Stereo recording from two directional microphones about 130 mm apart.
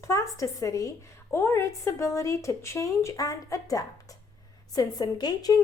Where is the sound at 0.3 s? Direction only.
25° left (ahead or behind).